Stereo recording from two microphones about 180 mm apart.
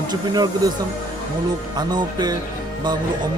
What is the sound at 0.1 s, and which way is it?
Speech, 25° right (ahead or behind).